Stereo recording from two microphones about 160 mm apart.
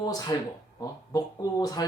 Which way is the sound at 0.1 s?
25° left (ahead or behind).